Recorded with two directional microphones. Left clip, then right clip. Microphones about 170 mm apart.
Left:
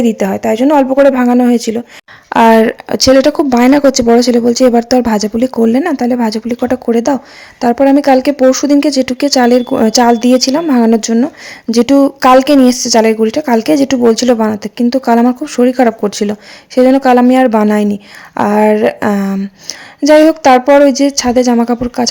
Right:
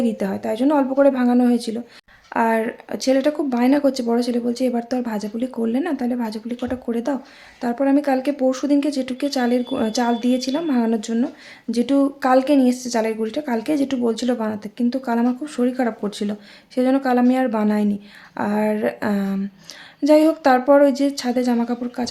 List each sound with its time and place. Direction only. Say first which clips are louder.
0.0 s speech: left 11 dB; 40° left (ahead or behind)
2.3 s speech: left 13 dB; 55° left (ahead or behind)